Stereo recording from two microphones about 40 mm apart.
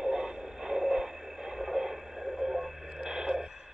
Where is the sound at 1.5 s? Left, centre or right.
Centre.